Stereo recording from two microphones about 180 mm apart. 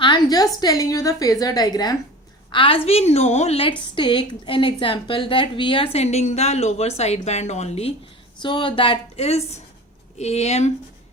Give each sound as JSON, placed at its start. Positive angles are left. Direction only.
{"t": 0.0, "sound": "a woman's voice", "side_deg": 25}